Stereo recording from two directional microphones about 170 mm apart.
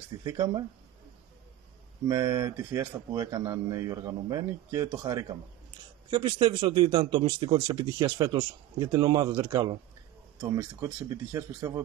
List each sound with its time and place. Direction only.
0.2 s speech: 20° right (ahead or behind)
2.0 s speech: 20° right (ahead or behind)